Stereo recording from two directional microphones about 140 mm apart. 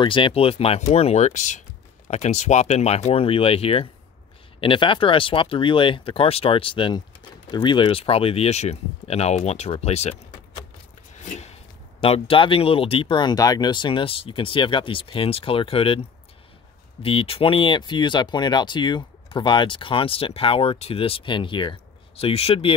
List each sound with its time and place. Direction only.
0.0 s speech: 35° left (ahead or behind)
11.1 s a sound: 50° left (ahead or behind)
12.0 s speech: 40° left (ahead or behind)
17.0 s speech: 40° left (ahead or behind)